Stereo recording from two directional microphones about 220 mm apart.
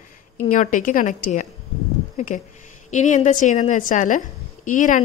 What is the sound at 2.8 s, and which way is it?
A woman's voice, 35° left (ahead or behind).